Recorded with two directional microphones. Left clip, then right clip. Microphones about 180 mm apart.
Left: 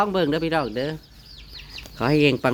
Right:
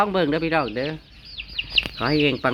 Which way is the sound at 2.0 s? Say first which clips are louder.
Left 7 dB; 25° left (ahead or behind).